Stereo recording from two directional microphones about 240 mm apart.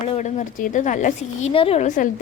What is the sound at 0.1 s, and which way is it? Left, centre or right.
A woman's voice, left.